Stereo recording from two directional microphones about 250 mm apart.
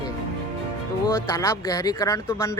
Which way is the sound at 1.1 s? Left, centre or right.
Centre.